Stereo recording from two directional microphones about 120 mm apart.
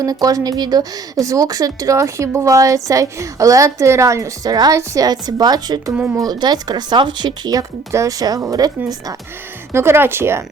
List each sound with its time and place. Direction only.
0.0 s a woman's voice: 30° right (ahead or behind)
9.7 s a woman's voice: 20° right (ahead or behind)